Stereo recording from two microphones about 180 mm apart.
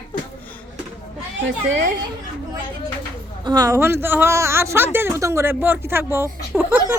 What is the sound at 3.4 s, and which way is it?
Speech, 20° right (ahead or behind).